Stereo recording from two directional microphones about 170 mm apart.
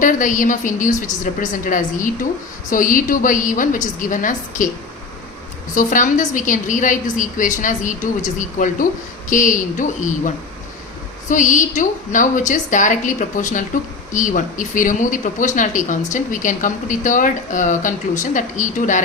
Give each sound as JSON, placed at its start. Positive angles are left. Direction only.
{"t": 0.0, "sound": "speech", "side_deg": 50}
{"t": 5.7, "sound": "speech", "side_deg": 50}